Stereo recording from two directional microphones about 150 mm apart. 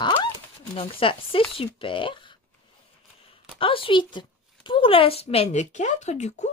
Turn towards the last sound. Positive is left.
turn(degrees=50)  # may be behind; listen again after turning